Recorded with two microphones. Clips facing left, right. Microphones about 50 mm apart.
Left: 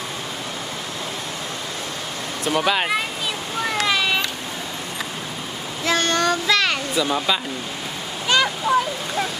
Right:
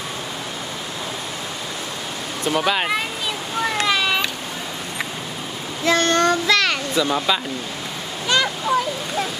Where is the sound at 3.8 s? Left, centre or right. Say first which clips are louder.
Even; centre.